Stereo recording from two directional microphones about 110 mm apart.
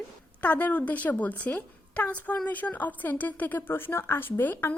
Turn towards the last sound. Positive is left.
turn(degrees=15)  # may be behind; listen again after turning